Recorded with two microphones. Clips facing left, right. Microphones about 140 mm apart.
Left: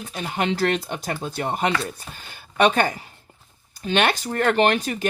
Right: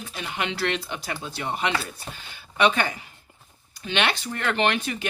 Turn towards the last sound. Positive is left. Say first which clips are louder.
# left 5 dB
turn(degrees=40)  # may be behind; listen again after turning